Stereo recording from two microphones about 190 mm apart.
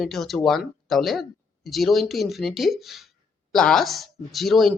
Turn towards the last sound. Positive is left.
turn(degrees=0)  # may be behind; listen again after turning